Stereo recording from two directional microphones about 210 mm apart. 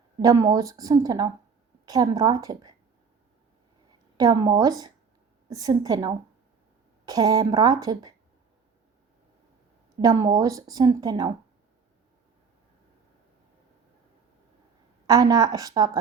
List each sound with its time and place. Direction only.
0.2 s a woman's voice: 15° right (ahead or behind)
4.2 s a woman's voice: 20° right (ahead or behind)
10.0 s a woman's voice: 15° right (ahead or behind)
15.0 s a woman's voice: 15° right (ahead or behind)